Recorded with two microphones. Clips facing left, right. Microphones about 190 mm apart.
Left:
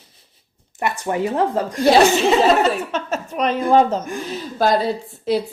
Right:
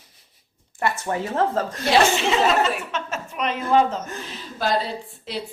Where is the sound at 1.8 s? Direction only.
40° left (ahead or behind).